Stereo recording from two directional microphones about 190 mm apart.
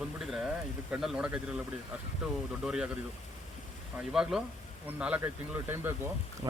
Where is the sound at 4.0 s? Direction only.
5° right (ahead or behind).